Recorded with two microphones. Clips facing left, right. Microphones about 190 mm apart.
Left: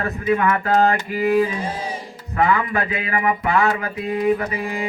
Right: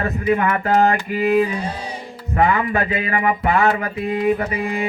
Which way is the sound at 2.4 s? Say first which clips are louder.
Right 1 dB; 35° right (ahead or behind).